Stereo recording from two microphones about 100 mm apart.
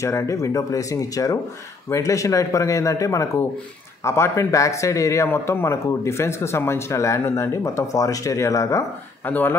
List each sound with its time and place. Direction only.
0.0 s speech: 30° left (ahead or behind)
9.2 s speech: 20° left (ahead or behind)